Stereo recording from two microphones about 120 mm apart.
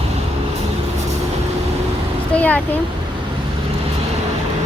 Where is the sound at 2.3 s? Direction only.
10° left (ahead or behind).